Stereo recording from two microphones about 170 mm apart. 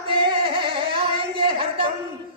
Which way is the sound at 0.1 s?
30° right (ahead or behind).